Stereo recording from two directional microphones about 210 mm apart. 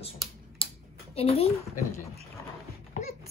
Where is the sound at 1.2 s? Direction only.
30° left (ahead or behind).